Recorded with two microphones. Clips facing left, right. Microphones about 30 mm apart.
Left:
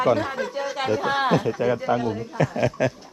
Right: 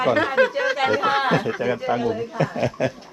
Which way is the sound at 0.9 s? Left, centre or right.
Right.